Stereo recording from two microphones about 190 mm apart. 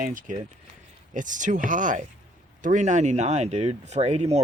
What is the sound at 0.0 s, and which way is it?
Speech, 45° right (ahead or behind).